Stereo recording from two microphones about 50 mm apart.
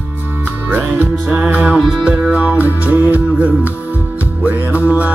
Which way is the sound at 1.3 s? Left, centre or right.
Right.